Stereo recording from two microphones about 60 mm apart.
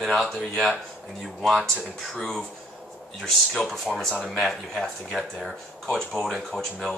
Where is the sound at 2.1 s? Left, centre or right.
Centre.